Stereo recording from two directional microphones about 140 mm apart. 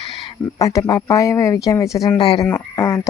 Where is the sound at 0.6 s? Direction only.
25° left (ahead or behind).